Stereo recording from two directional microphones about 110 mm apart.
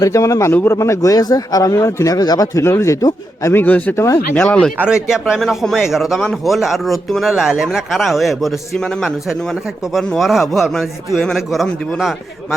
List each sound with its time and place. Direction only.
0.0 s a man's voice: 30° left (ahead or behind)
4.0 s a man's voice: 25° left (ahead or behind)
4.4 s a man's voice: 5° left (ahead or behind)
4.8 s a man's voice: 5° right (ahead or behind)
9.9 s a man's voice: centre (ahead or behind)